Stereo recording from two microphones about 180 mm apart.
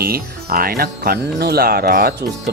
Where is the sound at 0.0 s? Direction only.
55° right (ahead or behind).